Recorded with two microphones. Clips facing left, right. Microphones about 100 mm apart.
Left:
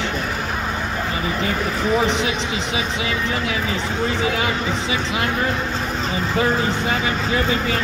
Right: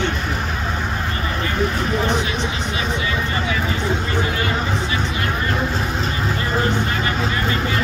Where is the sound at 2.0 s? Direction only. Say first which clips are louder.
Left 1 dB; 90° left.